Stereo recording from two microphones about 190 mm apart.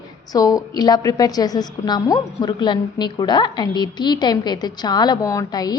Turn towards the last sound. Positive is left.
turn(degrees=20)  # may be behind; listen again after turning